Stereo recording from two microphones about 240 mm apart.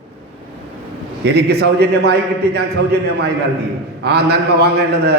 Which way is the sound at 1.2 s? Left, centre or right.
Right.